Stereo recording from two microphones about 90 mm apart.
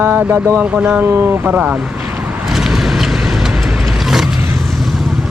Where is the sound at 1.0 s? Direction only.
25° right (ahead or behind).